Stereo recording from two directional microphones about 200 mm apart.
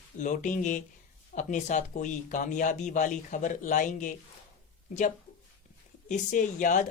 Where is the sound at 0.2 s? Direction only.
40° left (ahead or behind).